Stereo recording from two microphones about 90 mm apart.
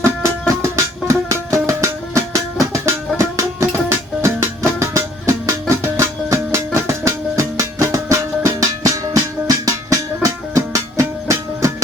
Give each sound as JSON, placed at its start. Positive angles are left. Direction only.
{"t": 0.0, "sound": "music", "side_deg": -35}